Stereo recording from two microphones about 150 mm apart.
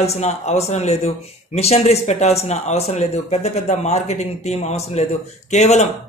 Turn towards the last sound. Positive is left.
turn(degrees=50)  # may be behind; listen again after turning